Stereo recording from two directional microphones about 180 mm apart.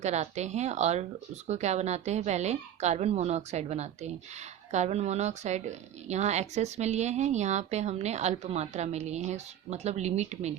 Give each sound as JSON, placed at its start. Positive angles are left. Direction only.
{"t": 0.0, "sound": "a woman's voice", "side_deg": -40}